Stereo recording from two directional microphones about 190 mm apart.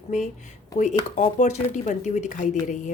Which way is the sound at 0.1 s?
40° left (ahead or behind).